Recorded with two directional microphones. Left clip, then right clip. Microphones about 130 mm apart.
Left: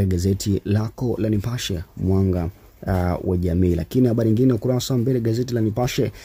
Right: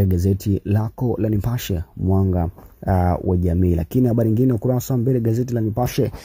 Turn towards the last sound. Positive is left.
turn(degrees=-30)  # may be behind; listen again after turning